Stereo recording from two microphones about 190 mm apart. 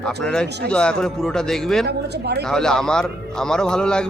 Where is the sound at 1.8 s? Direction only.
60° right (ahead or behind).